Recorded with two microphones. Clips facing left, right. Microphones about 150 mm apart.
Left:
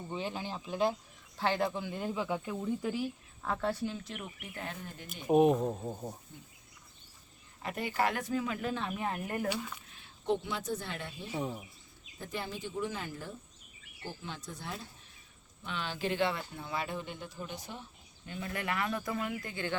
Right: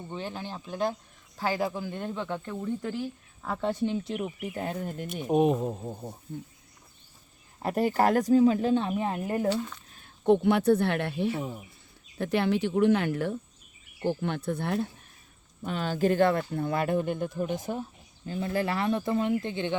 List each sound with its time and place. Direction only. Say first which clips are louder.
0.1 s speech: right 1 dB; 5° left (ahead or behind)
3.6 s speech: right 9 dB; 20° right (ahead or behind); by 5.0 s 50° right (ahead or behind)
5.3 s speech: right 1 dB; centre (ahead or behind)
7.6 s speech: right 8 dB; 45° right (ahead or behind); by 9.5 s 25° right (ahead or behind)
9.5 s speech: right 7 dB; 10° left (ahead or behind)
9.9 s speech: right 10 dB; 50° right (ahead or behind)
15.6 s speech: right 10 dB; 45° right (ahead or behind)
18.3 s speech: right 8 dB; 30° right (ahead or behind)